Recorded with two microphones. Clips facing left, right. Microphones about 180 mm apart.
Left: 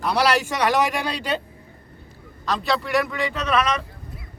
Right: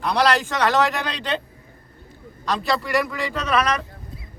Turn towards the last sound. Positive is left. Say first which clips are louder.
# even
turn(degrees=0)  # may be behind; listen again after turning